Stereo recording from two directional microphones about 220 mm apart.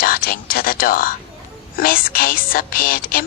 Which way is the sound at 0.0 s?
40° left (ahead or behind).